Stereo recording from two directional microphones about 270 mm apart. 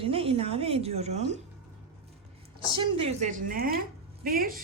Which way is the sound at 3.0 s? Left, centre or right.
Right.